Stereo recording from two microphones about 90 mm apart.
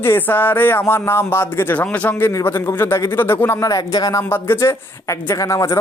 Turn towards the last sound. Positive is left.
turn(degrees=35)  # may be behind; listen again after turning